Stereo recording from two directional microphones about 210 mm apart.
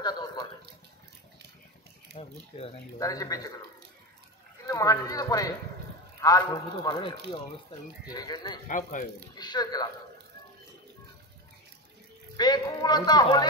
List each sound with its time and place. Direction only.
0.0 s a sound: 20° left (ahead or behind)
2.1 s a man's voice: 25° left (ahead or behind)
3.0 s a man's voice: 15° left (ahead or behind)
4.6 s a man's voice: 15° left (ahead or behind)
8.6 s speech: 40° left (ahead or behind)
9.3 s a man's voice: 20° left (ahead or behind)
12.4 s a man's voice: 20° left (ahead or behind)